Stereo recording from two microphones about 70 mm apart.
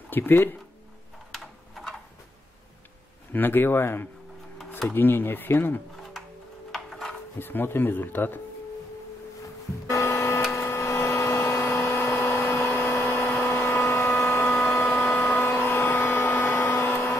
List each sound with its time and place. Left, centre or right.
0.1 s speech: left
3.3 s speech: left
6.7 s wood: centre
7.3 s speech: left
9.8 s printer: left
10.5 s a sound: left